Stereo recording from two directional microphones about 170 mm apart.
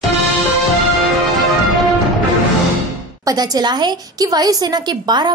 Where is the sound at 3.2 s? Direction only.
25° right (ahead or behind).